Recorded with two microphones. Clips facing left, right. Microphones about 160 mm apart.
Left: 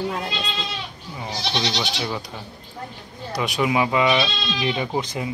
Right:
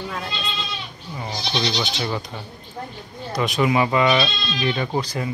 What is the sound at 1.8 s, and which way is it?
Speech, 5° left (ahead or behind).